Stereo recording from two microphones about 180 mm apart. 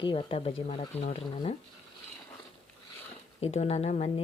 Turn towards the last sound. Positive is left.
turn(degrees=35)  # may be behind; listen again after turning